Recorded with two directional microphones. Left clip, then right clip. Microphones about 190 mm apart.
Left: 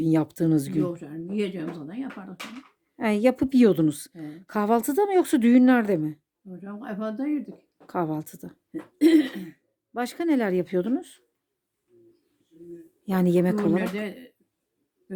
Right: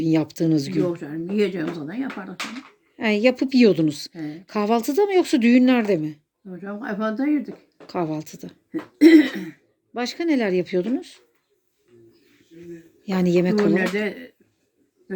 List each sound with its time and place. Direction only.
0.0 s speech: 25° left (ahead or behind)
2.9 s a woman's voice: 25° left (ahead or behind)
13.1 s a woman's voice: 25° left (ahead or behind)